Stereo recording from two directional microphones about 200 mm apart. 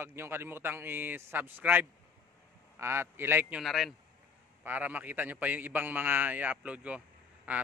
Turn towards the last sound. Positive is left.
turn(degrees=-10)  # may be behind; listen again after turning